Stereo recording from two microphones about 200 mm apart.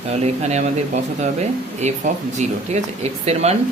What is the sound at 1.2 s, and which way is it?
A man's voice, 35° right (ahead or behind).